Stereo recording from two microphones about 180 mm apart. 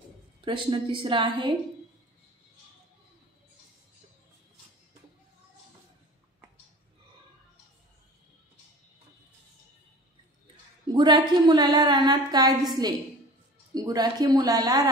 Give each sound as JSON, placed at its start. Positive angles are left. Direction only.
{"t": 0.5, "sound": "a woman's voice", "side_deg": -25}
{"t": 10.9, "sound": "a woman's voice", "side_deg": -25}